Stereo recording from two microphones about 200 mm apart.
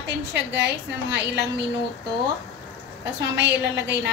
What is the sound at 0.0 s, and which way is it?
A woman's voice, 60° right (ahead or behind).